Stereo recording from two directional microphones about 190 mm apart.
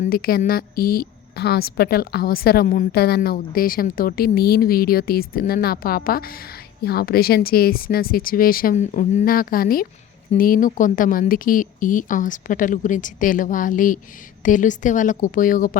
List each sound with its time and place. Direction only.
0.0 s speech: 50° left (ahead or behind)